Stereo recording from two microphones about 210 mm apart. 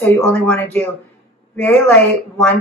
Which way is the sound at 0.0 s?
5° left (ahead or behind).